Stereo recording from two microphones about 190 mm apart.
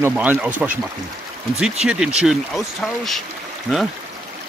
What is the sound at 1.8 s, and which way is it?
Speech, 5° right (ahead or behind).